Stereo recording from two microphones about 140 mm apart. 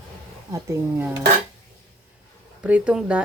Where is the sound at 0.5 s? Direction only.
10° right (ahead or behind).